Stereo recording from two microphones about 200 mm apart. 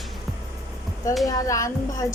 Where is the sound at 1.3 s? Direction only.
15° left (ahead or behind).